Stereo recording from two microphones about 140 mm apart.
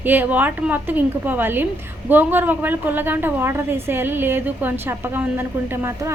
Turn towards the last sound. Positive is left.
turn(degrees=-15)  # may be behind; listen again after turning